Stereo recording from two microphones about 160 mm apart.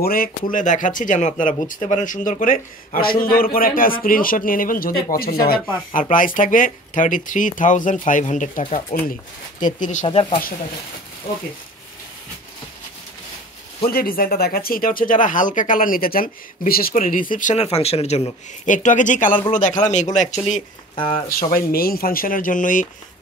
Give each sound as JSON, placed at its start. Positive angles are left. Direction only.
{"t": 0.0, "sound": "speech", "side_deg": 65}
{"t": 5.9, "sound": "speech", "side_deg": 55}
{"t": 10.0, "sound": "speech", "side_deg": 35}
{"t": 13.8, "sound": "speech", "side_deg": 70}
{"t": 17.6, "sound": "speech", "side_deg": 40}
{"t": 20.9, "sound": "speech", "side_deg": 30}
{"t": 21.3, "sound": "speech", "side_deg": 65}